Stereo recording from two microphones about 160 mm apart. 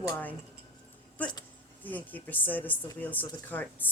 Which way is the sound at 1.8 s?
10° left (ahead or behind).